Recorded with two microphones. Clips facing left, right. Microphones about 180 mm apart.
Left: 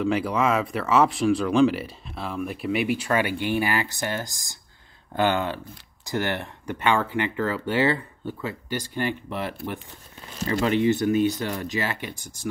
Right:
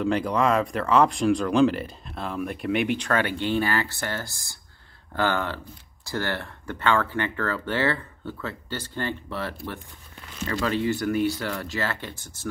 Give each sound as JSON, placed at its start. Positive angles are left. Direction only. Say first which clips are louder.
{"t": 0.0, "sound": "speech", "louder": "even", "side_deg": 5}